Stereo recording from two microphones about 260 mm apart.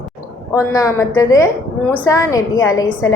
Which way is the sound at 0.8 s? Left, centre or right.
Centre.